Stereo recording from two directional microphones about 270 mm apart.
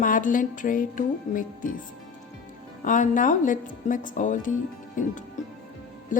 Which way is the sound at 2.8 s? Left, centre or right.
Left.